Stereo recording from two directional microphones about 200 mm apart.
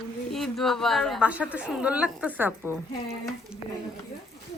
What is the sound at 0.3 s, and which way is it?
A woman's voice, centre (ahead or behind).